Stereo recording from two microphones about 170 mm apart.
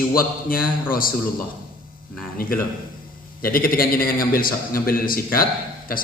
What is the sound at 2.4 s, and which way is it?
A man's voice, 60° left (ahead or behind).